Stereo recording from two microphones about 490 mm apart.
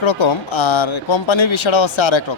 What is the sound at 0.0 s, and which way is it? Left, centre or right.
Speech, left.